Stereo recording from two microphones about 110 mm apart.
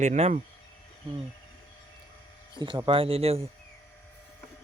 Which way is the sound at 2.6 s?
45° right (ahead or behind).